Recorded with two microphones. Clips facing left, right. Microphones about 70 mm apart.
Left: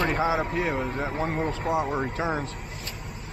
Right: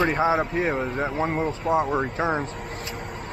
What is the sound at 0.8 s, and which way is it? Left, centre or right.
Speech, right.